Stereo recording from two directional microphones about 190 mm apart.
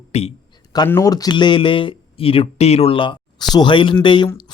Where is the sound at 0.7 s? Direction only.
15° left (ahead or behind).